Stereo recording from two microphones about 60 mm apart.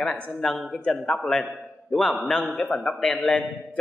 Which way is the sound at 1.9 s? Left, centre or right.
Centre.